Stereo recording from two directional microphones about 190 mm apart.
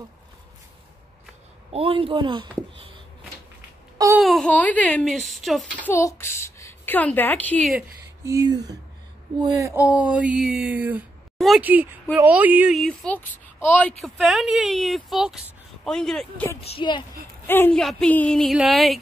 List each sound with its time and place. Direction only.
1.7 s speech: 30° right (ahead or behind)
4.2 s speech: centre (ahead or behind)
8.3 s speech: 20° right (ahead or behind); by 16.4 s centre (ahead or behind)
16.6 s a child's voice: 25° left (ahead or behind)
17.5 s speech: 10° left (ahead or behind)